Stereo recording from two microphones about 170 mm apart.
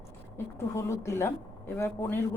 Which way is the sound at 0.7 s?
15° left (ahead or behind).